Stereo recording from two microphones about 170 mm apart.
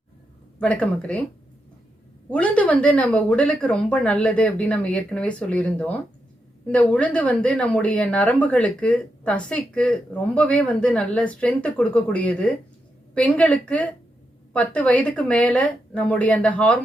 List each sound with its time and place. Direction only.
0.6 s a woman's voice: 5° left (ahead or behind)
2.3 s a woman's voice: 10° left (ahead or behind)